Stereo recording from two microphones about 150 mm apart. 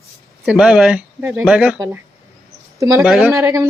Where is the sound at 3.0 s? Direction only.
5° right (ahead or behind).